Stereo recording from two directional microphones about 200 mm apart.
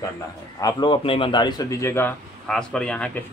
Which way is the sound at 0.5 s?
20° left (ahead or behind).